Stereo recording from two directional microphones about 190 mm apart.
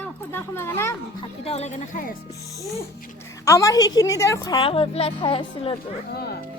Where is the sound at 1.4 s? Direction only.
35° left (ahead or behind).